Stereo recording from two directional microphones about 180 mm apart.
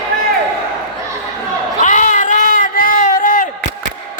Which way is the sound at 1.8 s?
45° left (ahead or behind).